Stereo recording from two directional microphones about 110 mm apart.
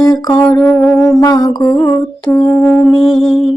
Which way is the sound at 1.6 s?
15° left (ahead or behind).